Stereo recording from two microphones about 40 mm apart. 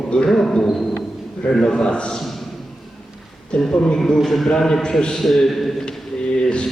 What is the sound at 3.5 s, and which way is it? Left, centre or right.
Speech, left.